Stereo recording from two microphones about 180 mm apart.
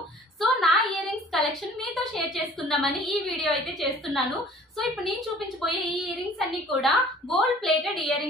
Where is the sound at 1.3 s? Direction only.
Centre (ahead or behind).